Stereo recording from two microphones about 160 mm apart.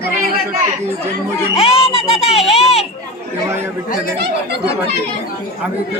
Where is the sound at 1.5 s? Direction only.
35° left (ahead or behind).